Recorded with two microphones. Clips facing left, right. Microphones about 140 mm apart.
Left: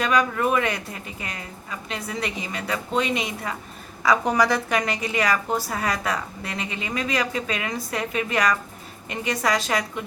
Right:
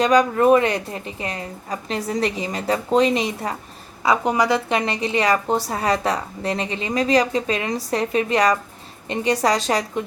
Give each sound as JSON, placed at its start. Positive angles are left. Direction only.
{"t": 0.0, "sound": "a woman's voice", "side_deg": -35}
{"t": 4.0, "sound": "a woman's voice", "side_deg": -25}